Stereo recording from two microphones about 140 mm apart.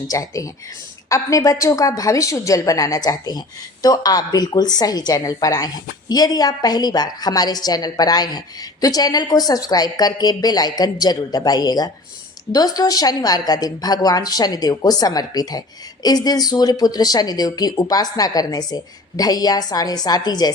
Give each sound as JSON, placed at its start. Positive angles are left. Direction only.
{"t": 0.1, "sound": "a woman's voice", "side_deg": 25}